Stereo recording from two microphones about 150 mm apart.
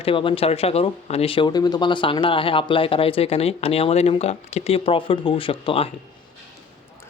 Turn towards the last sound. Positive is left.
turn(degrees=35)  # may be behind; listen again after turning